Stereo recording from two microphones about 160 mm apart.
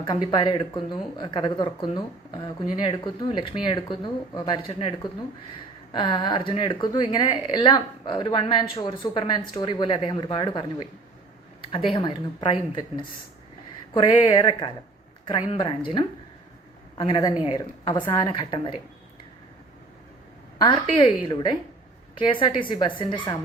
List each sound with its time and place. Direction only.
0.0 s speech: 25° left (ahead or behind)
11.7 s speech: 35° left (ahead or behind)
21.2 s speech: 25° left (ahead or behind)